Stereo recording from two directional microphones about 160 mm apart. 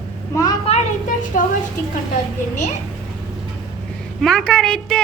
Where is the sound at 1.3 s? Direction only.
50° left (ahead or behind).